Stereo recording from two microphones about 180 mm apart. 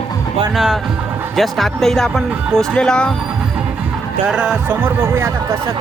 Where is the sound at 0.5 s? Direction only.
Centre (ahead or behind).